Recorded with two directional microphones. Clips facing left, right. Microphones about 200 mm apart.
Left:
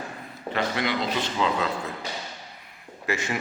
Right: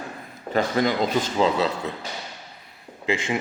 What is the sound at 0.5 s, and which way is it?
Speech, 45° right (ahead or behind).